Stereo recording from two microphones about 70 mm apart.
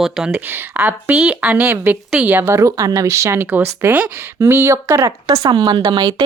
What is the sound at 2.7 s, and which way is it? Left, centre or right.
Speech, right.